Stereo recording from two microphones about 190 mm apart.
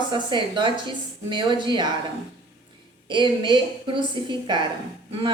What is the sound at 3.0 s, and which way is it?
A woman's voice, 25° right (ahead or behind).